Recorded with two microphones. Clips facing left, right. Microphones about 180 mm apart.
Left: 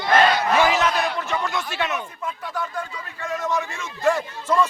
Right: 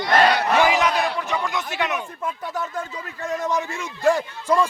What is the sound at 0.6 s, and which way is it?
A man's voice, 15° right (ahead or behind).